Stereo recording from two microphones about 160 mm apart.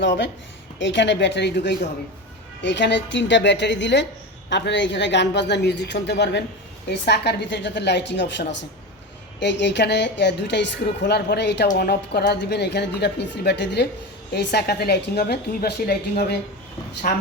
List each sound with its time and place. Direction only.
0.9 s a woman's voice: 90° left
17.1 s a woman's voice: 65° left (ahead or behind)